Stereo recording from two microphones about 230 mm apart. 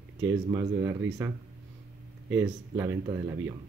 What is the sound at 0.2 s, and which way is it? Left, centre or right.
Speech, centre.